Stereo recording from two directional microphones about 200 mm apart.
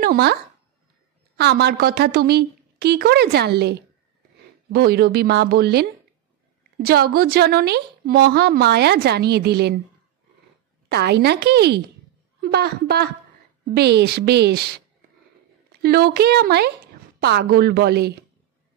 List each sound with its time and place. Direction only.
0.0 s speech: 50° right (ahead or behind)
1.4 s a woman's voice: 55° right (ahead or behind)
10.9 s a woman's voice: 55° right (ahead or behind)
15.8 s a woman's voice: 50° right (ahead or behind)